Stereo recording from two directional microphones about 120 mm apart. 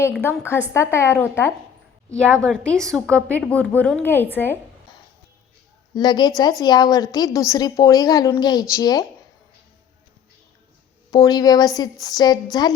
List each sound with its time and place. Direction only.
0.2 s a woman's voice: 20° left (ahead or behind)
2.4 s a woman's voice: 5° left (ahead or behind)
5.9 s a woman's voice: 35° left (ahead or behind)
11.1 s a woman's voice: 35° left (ahead or behind)